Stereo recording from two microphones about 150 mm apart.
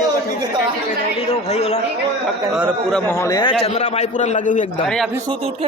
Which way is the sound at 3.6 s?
45° left (ahead or behind).